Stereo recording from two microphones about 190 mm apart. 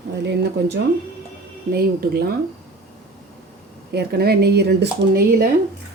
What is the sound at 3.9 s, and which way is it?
Speech, 55° right (ahead or behind).